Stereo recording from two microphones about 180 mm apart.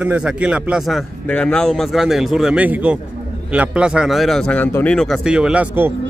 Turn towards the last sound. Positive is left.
turn(degrees=-10)  # may be behind; listen again after turning